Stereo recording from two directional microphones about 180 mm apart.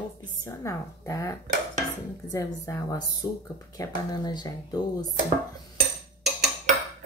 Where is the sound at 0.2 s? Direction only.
20° left (ahead or behind).